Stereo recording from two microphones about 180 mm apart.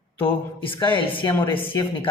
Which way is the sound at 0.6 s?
25° left (ahead or behind).